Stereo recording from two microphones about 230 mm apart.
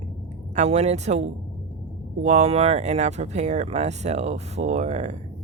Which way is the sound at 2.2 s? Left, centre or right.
Right.